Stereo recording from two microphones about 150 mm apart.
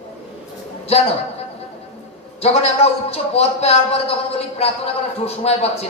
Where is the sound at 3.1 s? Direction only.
45° left (ahead or behind).